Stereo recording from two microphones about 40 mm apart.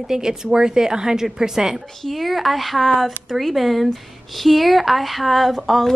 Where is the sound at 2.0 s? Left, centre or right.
Centre.